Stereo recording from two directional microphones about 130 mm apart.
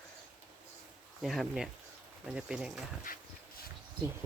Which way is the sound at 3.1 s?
90° left.